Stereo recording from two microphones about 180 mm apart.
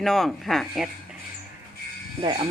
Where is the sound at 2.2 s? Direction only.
30° right (ahead or behind).